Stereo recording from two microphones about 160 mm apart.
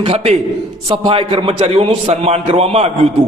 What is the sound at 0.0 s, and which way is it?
A man's voice, 40° right (ahead or behind).